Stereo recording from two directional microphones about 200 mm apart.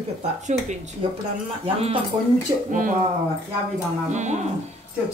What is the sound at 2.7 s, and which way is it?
Speech, 40° right (ahead or behind).